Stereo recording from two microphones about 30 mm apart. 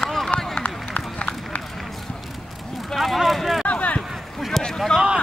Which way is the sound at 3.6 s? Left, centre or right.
Left.